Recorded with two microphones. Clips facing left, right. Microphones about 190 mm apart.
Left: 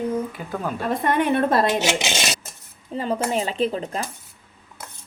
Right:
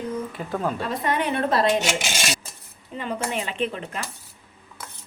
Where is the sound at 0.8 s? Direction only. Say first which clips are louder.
Left 4 dB; 50° left (ahead or behind).